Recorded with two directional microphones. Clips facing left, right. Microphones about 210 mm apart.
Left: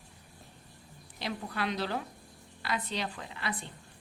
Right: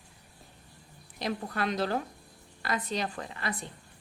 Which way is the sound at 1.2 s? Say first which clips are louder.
Right 3 dB; 45° right (ahead or behind).